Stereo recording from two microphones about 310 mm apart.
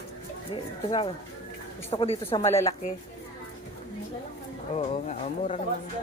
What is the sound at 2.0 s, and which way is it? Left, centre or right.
Speech, centre.